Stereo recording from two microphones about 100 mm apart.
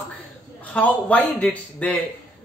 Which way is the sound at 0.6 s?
15° left (ahead or behind).